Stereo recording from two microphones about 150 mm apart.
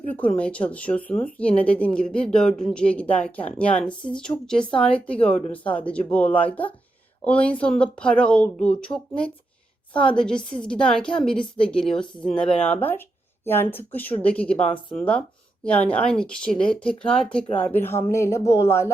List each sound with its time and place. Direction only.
0.2 s speech: 10° left (ahead or behind)